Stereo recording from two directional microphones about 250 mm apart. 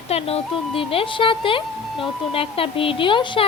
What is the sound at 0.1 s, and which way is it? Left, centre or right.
Speech, left.